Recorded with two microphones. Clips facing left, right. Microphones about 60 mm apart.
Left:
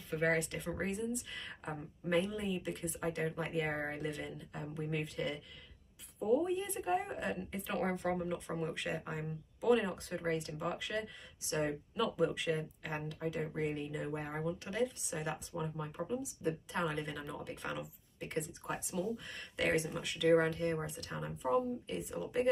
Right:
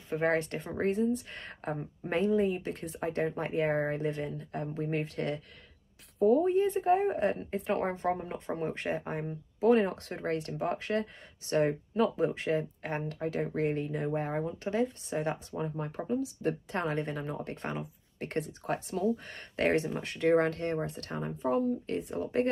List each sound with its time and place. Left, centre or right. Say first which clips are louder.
0.1 s speech: right 4 dB; right
16.1 s speech: right 7 dB; right